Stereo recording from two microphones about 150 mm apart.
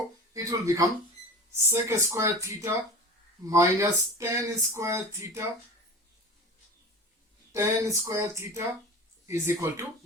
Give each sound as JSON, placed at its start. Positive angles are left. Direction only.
{"t": 0.3, "sound": "speech", "side_deg": -20}
{"t": 7.5, "sound": "speech", "side_deg": -20}